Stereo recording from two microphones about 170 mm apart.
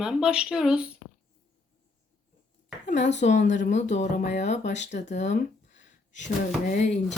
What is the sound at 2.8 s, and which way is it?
Speech, 45° left (ahead or behind).